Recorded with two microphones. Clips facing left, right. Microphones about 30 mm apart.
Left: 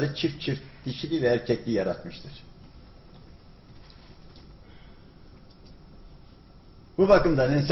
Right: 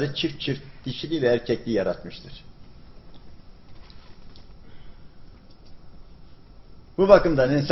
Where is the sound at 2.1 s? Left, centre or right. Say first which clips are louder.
Right 2 dB; centre.